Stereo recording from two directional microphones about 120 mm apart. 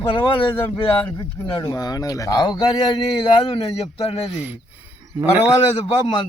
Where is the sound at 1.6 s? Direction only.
30° left (ahead or behind).